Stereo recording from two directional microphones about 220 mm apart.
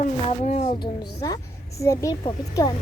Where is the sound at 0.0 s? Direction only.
35° left (ahead or behind).